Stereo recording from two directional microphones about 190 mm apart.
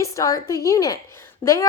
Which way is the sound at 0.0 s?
15° left (ahead or behind).